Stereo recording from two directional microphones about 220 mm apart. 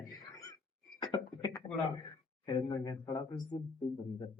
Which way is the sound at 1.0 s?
20° left (ahead or behind).